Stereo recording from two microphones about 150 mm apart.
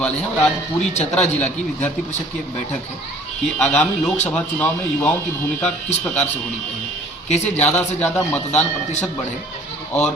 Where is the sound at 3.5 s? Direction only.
5° left (ahead or behind).